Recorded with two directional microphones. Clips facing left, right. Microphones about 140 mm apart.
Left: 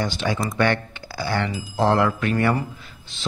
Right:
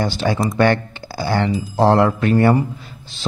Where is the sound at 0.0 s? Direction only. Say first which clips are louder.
Right 5 dB; 35° right (ahead or behind).